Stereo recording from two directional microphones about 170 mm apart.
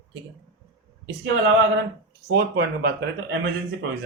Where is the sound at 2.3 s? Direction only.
75° right (ahead or behind).